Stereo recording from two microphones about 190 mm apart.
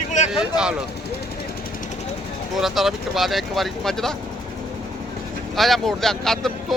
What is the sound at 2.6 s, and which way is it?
Speech, centre (ahead or behind).